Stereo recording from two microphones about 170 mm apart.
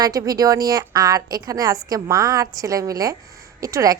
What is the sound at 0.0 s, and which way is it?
A woman's voice, 20° right (ahead or behind).